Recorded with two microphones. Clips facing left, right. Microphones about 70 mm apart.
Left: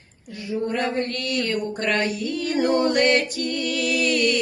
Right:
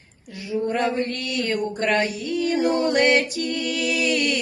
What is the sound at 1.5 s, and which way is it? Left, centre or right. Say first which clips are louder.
Music: right 5 dB; right.